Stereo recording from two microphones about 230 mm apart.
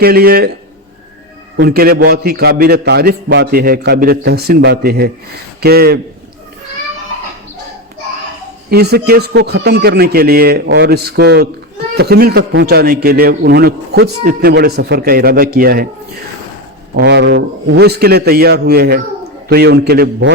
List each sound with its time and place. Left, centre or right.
0.0 s a man's voice: right
1.5 s a man's voice: right
8.7 s a man's voice: right
16.9 s a man's voice: right